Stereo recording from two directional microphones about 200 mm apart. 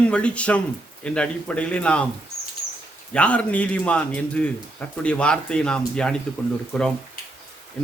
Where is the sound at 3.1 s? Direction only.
5° left (ahead or behind).